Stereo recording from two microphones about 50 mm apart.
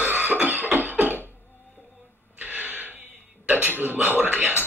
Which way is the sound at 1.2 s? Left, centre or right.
Left.